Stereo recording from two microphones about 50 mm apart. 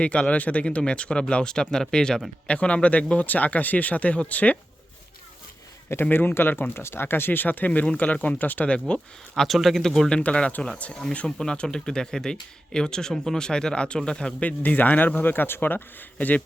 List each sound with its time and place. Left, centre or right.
0.0 s speech: left
2.5 s speech: left
6.1 s speech: left
8.9 s speech: left
9.4 s speech: centre
10.2 s speech: left
11.3 s speech: centre
14.4 s speech: left
16.1 s speech: left